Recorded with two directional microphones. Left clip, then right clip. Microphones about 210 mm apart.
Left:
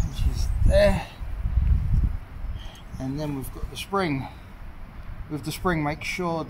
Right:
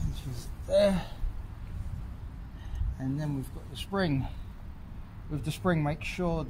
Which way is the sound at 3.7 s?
30° right (ahead or behind).